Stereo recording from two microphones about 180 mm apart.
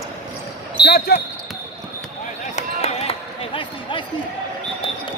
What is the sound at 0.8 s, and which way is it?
Basketball bounce, 60° left (ahead or behind).